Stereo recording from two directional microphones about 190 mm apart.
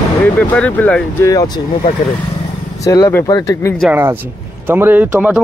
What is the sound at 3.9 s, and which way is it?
Speech, 10° right (ahead or behind).